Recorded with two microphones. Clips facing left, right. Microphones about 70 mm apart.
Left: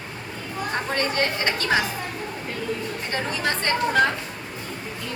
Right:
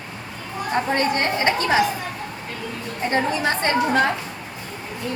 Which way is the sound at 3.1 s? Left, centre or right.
Right.